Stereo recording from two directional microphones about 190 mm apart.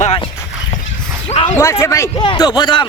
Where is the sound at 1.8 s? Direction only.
15° left (ahead or behind).